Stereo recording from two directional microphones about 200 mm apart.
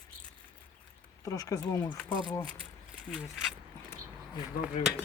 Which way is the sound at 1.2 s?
15° left (ahead or behind).